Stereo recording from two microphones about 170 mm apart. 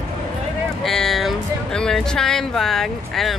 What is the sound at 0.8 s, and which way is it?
Speech, centre (ahead or behind).